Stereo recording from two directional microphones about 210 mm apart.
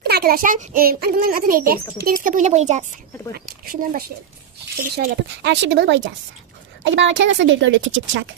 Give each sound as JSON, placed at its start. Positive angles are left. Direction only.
{"t": 0.0, "sound": "a child's voice", "side_deg": -50}
{"t": 4.9, "sound": "a woman's voice", "side_deg": -55}